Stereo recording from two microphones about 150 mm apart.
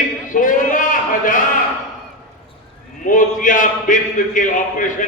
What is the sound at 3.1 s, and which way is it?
A man's voice, 60° left (ahead or behind).